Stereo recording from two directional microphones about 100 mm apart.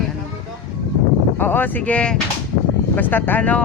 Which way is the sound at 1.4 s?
20° left (ahead or behind).